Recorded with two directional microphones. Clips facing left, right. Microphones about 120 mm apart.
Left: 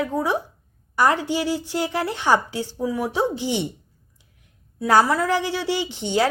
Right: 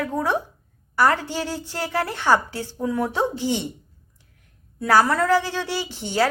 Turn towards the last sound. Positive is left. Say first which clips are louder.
# left 1 dB
turn(degrees=20)  # may be behind; listen again after turning